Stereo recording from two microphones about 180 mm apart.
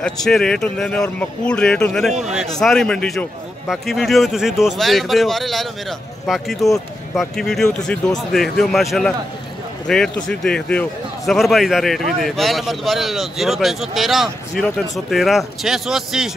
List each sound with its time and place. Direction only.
0.0 s speech: 5° left (ahead or behind)